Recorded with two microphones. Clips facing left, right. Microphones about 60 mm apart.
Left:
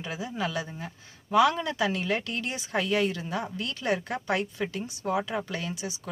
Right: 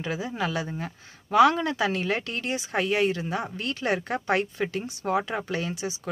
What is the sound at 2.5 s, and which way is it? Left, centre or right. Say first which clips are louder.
Speech: right 2 dB; right.